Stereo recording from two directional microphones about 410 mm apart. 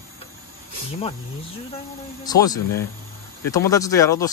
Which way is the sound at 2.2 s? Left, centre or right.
Centre.